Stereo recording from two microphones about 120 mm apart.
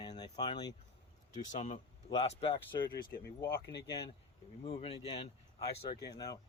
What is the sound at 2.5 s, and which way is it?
Speech, 40° left (ahead or behind).